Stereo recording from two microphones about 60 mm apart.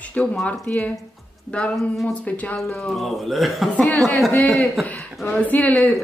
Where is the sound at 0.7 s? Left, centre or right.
Left.